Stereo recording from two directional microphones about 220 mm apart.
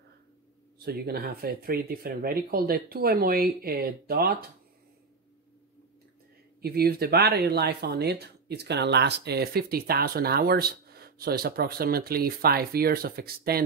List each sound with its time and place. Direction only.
0.7 s speech: 45° right (ahead or behind)
6.6 s speech: 45° right (ahead or behind)